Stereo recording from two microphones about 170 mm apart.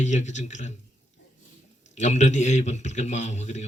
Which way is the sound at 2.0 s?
45° left (ahead or behind).